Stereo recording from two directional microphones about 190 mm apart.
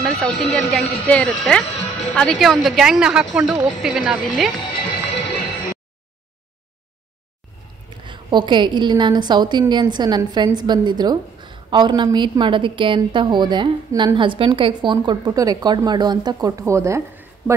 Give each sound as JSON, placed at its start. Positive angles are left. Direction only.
{"t": 0.0, "sound": "speech", "side_deg": 0}
{"t": 8.0, "sound": "a woman's voice", "side_deg": -25}